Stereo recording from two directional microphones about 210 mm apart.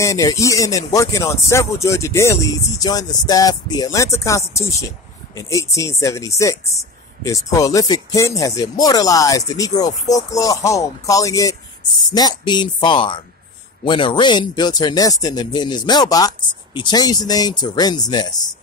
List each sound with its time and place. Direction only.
0.0 s speech: 15° left (ahead or behind)